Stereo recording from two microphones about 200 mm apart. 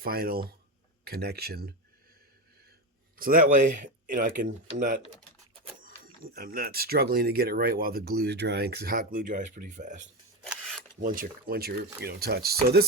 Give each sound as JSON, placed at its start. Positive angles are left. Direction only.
{"t": 0.0, "sound": "speech", "side_deg": -50}
{"t": 3.2, "sound": "speech", "side_deg": -45}
{"t": 6.2, "sound": "speech", "side_deg": -50}
{"t": 10.5, "sound": "filing", "side_deg": 0}
{"t": 11.0, "sound": "speech", "side_deg": -45}